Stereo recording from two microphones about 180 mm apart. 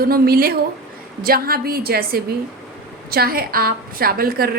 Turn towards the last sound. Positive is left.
turn(degrees=-55)  # may be behind; listen again after turning